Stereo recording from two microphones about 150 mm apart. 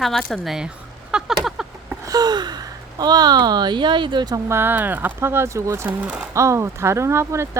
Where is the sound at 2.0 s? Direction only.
25° right (ahead or behind).